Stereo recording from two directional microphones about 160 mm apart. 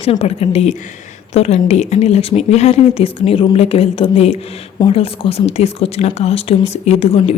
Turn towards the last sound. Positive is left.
turn(degrees=40)  # may be behind; listen again after turning